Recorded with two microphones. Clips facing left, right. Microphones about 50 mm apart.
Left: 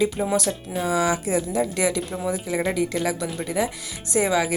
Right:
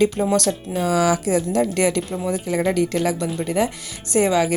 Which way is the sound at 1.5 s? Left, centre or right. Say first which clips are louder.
Right 4 dB; right.